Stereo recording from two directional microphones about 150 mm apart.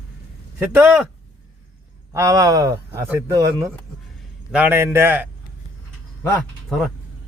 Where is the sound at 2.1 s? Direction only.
20° right (ahead or behind).